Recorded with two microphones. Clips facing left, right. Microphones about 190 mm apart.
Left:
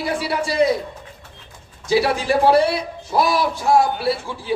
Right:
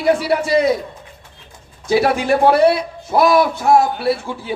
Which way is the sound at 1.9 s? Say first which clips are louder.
Right 3 dB; 55° right (ahead or behind).